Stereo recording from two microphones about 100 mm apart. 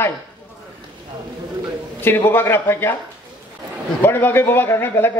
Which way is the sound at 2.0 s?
25° left (ahead or behind).